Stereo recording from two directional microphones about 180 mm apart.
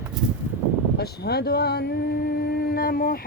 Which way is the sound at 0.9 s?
60° left (ahead or behind).